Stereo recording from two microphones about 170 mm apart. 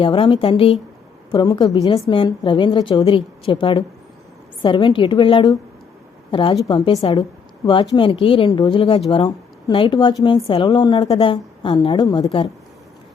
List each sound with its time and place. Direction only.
0.0 s a woman's voice: 30° left (ahead or behind)